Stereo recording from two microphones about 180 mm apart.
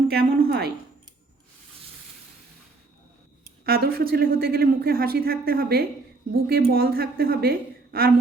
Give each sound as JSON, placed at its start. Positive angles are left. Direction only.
{"t": 0.1, "sound": "speech", "side_deg": -60}
{"t": 3.7, "sound": "speech", "side_deg": -60}